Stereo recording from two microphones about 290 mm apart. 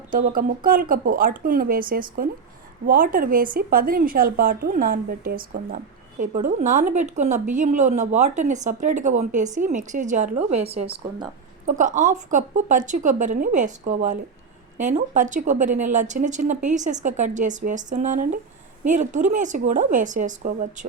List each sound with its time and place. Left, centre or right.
0.1 s a woman's voice: right